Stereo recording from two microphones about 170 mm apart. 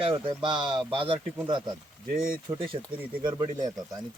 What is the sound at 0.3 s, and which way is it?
Speech, 25° right (ahead or behind).